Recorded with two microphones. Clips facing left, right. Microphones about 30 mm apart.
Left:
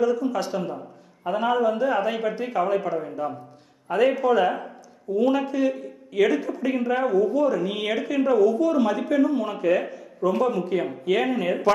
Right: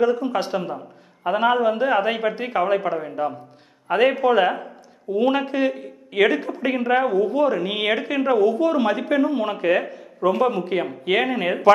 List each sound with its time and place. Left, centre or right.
0.0 s speech: right